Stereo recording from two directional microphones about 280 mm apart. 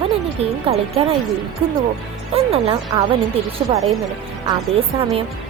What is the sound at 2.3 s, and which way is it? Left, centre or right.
Speech, right.